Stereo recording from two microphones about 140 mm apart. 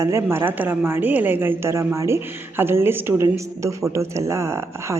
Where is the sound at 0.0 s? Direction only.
20° right (ahead or behind).